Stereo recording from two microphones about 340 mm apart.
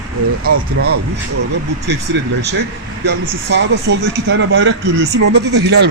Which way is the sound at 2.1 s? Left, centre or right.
Right.